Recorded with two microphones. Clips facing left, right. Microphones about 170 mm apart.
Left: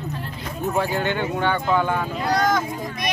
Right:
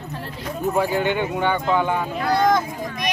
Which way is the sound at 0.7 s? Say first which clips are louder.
Right 2 dB; 10° right (ahead or behind).